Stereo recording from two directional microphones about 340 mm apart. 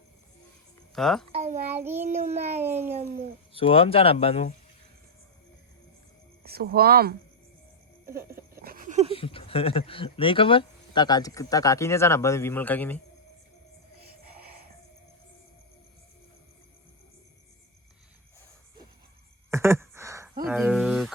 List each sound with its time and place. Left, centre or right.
0.9 s speech: centre
1.3 s a sound: centre
1.7 s child singing: centre
2.0 s a child's voice: centre
2.6 s child singing: centre
3.5 s speech: centre
6.4 s speech: right
8.6 s a sound: right
9.1 s speech: centre
19.5 s a sound: centre